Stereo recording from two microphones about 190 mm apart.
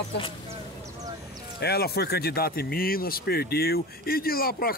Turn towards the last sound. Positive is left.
turn(degrees=50)  # may be behind; listen again after turning